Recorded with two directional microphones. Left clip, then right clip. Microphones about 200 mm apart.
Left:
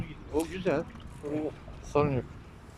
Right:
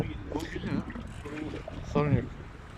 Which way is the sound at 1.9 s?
10° left (ahead or behind).